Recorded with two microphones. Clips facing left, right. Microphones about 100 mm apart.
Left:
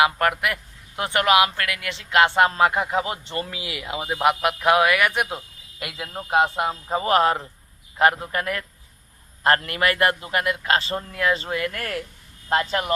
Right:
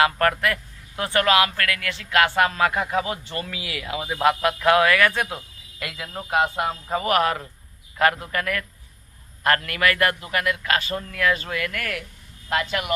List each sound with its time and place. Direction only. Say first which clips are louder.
0.0 s speech: even; 15° left (ahead or behind); by 12.9 s 30° left (ahead or behind)